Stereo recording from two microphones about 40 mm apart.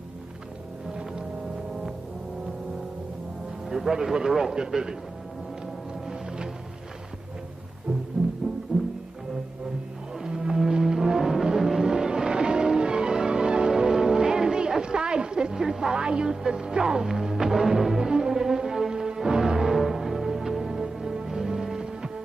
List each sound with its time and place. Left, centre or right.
3.6 s a man's voice: centre
8.2 s music: centre
8.7 s music: right
10.2 s music: centre
16.3 s a man's voice: centre
17.0 s music: centre